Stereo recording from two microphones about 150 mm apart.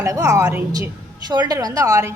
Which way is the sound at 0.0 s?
20° right (ahead or behind).